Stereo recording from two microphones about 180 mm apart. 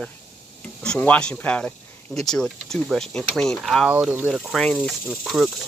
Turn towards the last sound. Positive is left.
turn(degrees=0)  # may be behind; listen again after turning